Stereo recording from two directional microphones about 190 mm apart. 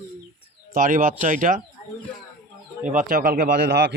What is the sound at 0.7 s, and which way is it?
Speech, 45° right (ahead or behind).